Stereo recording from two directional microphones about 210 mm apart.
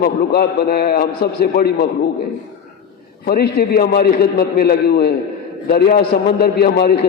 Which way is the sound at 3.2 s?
45° left (ahead or behind).